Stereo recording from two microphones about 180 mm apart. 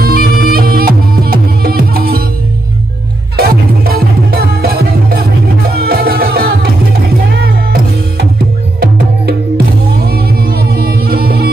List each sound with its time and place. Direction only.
0.0 s music: 55° right (ahead or behind)
3.3 s music: 55° right (ahead or behind)
10.0 s music: 60° right (ahead or behind)